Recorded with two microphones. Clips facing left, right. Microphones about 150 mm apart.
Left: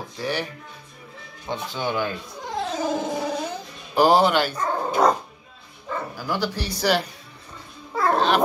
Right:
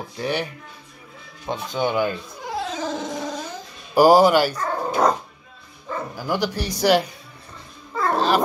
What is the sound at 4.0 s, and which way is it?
Speech, 10° right (ahead or behind).